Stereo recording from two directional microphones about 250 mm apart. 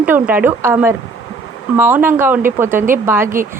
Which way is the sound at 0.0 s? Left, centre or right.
Centre.